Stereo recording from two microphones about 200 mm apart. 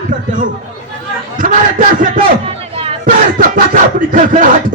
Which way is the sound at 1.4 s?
40° right (ahead or behind).